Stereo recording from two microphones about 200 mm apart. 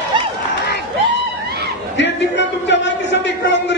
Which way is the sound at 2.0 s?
60° left (ahead or behind).